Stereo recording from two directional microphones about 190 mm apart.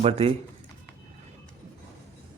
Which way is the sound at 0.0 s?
35° right (ahead or behind).